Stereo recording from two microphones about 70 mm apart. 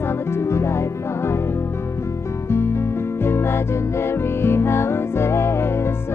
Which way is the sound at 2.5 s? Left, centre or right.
Left.